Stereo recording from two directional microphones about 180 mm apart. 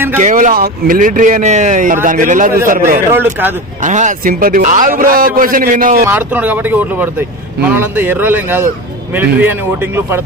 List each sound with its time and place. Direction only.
0.2 s a man's voice: 45° right (ahead or behind)
3.1 s speech: 10° right (ahead or behind)
3.8 s a man's voice: 45° right (ahead or behind)
6.1 s speech: 10° right (ahead or behind)